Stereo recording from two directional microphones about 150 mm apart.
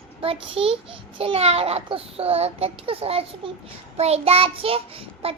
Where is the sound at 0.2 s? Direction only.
35° right (ahead or behind).